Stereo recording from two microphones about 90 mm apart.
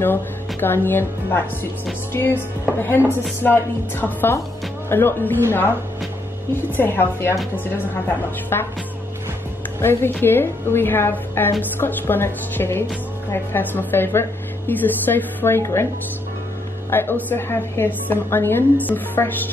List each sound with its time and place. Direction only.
0.0 s a woman's voice: 25° left (ahead or behind)
3.4 s a woman's voice: 25° left (ahead or behind)
9.8 s a woman's voice: 25° left (ahead or behind)
16.9 s a woman's voice: 25° left (ahead or behind)